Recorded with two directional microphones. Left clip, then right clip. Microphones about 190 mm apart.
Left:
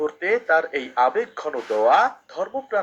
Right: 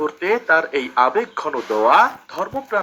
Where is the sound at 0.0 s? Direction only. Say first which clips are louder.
Right 2 dB; 30° right (ahead or behind).